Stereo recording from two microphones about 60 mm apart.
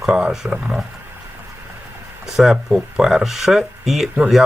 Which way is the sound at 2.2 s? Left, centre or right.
Centre.